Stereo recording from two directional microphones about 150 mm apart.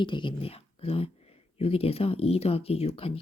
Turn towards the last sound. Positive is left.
turn(degrees=40)  # may be behind; listen again after turning